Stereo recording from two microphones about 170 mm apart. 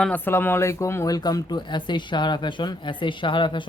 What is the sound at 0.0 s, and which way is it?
A man's voice, 10° left (ahead or behind).